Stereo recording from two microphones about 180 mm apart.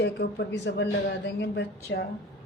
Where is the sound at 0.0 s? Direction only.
60° left (ahead or behind).